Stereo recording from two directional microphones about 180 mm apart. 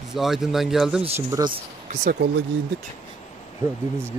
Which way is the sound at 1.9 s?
45° right (ahead or behind).